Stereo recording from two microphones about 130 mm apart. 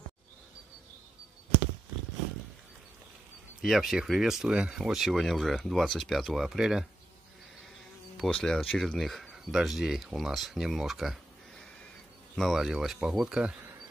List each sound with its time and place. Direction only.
3.6 s speech: centre (ahead or behind)
8.2 s speech: 5° left (ahead or behind)
12.4 s speech: centre (ahead or behind)